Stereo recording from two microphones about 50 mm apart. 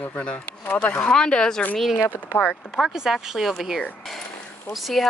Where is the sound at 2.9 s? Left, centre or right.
Centre.